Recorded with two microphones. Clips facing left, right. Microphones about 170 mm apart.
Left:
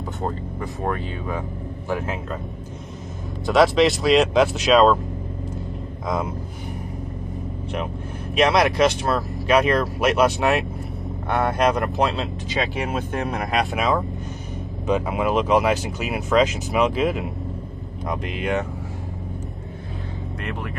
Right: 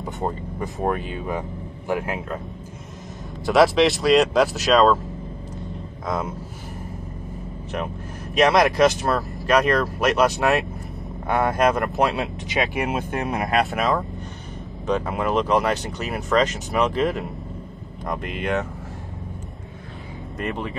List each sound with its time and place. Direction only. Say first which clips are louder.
0.0 s speech: even; 20° right (ahead or behind)
3.4 s speech: even; centre (ahead or behind)
8.4 s speech: right 1 dB; centre (ahead or behind)
12.2 s speech: right 1 dB; 20° right (ahead or behind)
13.1 s speech: right 2 dB; centre (ahead or behind)